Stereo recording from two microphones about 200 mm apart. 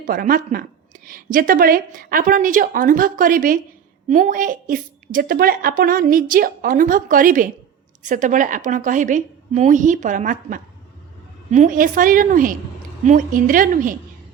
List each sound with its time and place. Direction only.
0.0 s a woman's voice: 45° right (ahead or behind)